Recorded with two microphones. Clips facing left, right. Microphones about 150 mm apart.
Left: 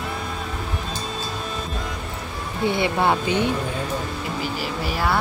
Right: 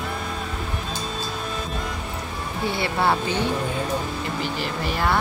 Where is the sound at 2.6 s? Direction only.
20° left (ahead or behind).